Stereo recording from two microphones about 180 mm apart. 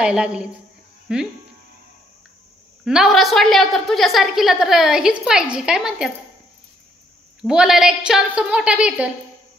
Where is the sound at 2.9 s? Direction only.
Centre (ahead or behind).